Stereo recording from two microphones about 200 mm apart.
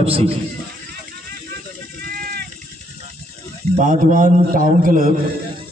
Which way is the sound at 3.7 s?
40° right (ahead or behind).